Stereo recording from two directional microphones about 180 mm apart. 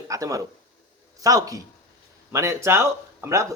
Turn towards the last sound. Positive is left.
turn(degrees=-15)  # may be behind; listen again after turning